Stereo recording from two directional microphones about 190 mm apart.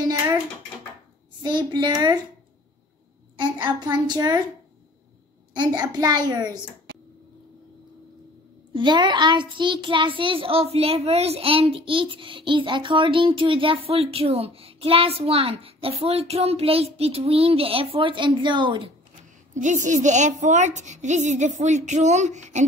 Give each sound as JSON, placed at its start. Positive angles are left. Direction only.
{"t": 1.4, "sound": "a child's voice", "side_deg": -25}
{"t": 3.3, "sound": "a woman's voice", "side_deg": -25}
{"t": 5.5, "sound": "a child's voice", "side_deg": -25}
{"t": 8.7, "sound": "a child's voice", "side_deg": -25}
{"t": 19.5, "sound": "a woman's voice", "side_deg": -40}